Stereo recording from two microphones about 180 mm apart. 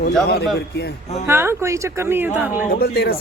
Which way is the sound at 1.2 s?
15° right (ahead or behind).